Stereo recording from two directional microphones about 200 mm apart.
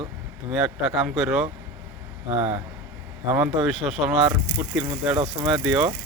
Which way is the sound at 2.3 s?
25° right (ahead or behind).